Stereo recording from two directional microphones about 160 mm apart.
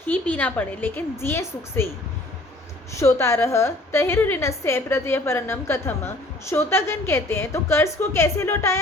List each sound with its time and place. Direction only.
0.1 s a woman's voice: 10° left (ahead or behind)
3.0 s a woman's voice: 15° left (ahead or behind)